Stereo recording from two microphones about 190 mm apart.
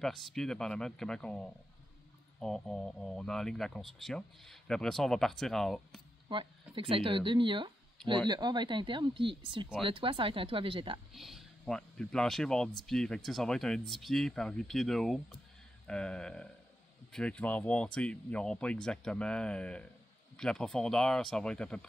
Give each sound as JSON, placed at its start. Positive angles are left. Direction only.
{"t": 0.0, "sound": "speech", "side_deg": 0}
{"t": 6.2, "sound": "speech", "side_deg": -25}
{"t": 11.1, "sound": "speech", "side_deg": 0}